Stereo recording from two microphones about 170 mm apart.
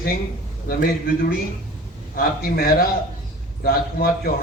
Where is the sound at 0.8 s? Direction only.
60° left (ahead or behind).